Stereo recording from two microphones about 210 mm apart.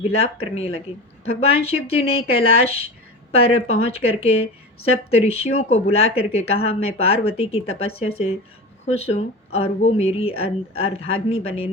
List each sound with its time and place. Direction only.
0.0 s speech: 30° left (ahead or behind)